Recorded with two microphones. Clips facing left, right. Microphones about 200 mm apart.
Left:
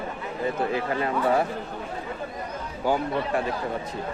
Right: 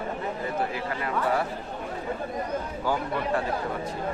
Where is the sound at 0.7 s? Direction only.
25° left (ahead or behind).